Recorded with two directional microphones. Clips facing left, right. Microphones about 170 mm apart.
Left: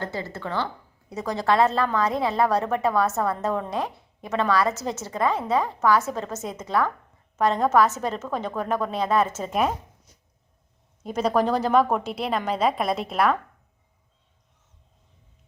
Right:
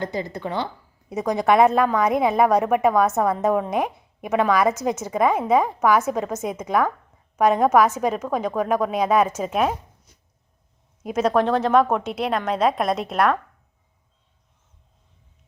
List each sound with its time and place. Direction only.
0.0 s a woman's voice: 15° right (ahead or behind)
11.0 s a woman's voice: 5° right (ahead or behind)